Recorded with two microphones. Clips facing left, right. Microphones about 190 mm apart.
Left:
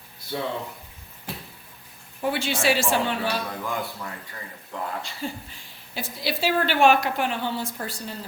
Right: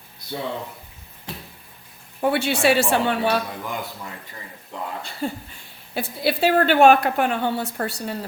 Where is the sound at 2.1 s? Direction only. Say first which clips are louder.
Right 5 dB; 60° right (ahead or behind).